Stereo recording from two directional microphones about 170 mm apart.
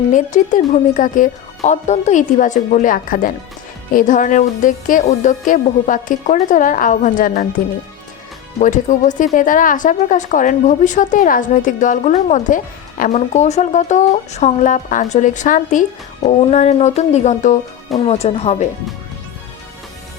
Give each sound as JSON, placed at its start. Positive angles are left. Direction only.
{"t": 0.1, "sound": "speech", "side_deg": 50}
{"t": 8.5, "sound": "speech", "side_deg": 50}